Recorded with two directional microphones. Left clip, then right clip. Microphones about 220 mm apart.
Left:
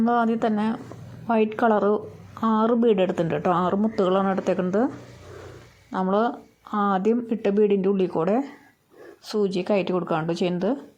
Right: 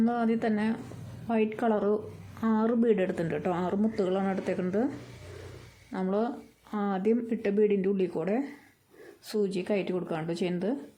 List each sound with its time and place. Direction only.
0.1 s speech: 15° left (ahead or behind)
5.9 s speech: 15° left (ahead or behind)